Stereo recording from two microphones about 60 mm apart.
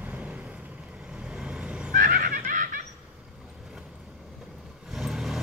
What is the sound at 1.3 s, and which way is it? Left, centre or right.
Vehicle, centre.